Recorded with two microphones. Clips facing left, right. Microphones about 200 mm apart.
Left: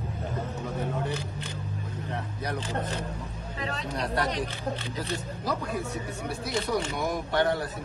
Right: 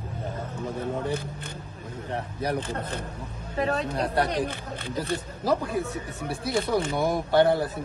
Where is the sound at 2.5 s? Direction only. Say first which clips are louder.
Right 1 dB; 55° right (ahead or behind).